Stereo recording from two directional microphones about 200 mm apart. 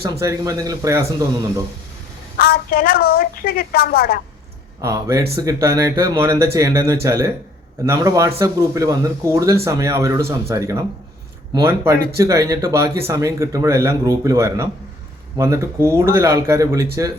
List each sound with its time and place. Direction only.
0.0 s speech: 15° right (ahead or behind)
2.4 s a woman's voice: 50° left (ahead or behind)
4.8 s speech: 15° right (ahead or behind)